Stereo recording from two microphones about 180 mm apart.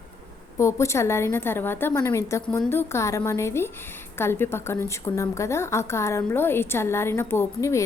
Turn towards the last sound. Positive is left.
turn(degrees=15)  # may be behind; listen again after turning